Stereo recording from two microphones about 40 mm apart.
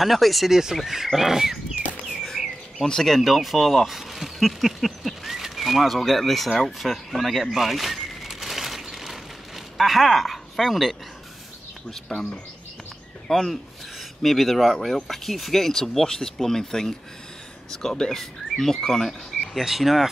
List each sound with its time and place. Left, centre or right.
0.0 s speech: centre
0.5 s speech: centre
2.4 s bird: centre
2.8 s speech: centre
3.2 s speech: centre
6.6 s a sound: centre
9.8 s speech: centre
12.1 s speech: centre
13.3 s speech: centre
19.6 s speech: centre